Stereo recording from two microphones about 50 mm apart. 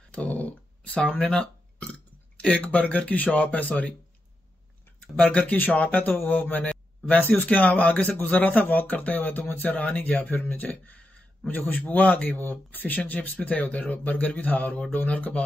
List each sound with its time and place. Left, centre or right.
0.1 s a sound: left
2.4 s a man's voice: left
5.1 s a man's voice: left